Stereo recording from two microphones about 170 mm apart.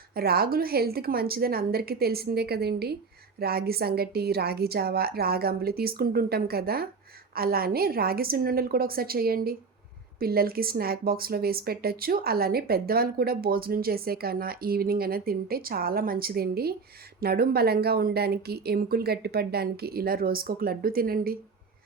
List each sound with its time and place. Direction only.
0.2 s speech: 65° right (ahead or behind)